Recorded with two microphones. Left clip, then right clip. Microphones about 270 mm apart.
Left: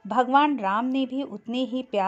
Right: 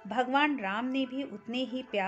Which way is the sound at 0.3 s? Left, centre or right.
Left.